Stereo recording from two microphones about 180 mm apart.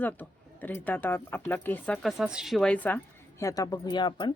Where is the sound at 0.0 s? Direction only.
10° left (ahead or behind).